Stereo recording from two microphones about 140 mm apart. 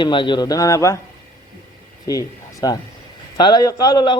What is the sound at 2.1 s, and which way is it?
A man's voice, 30° left (ahead or behind).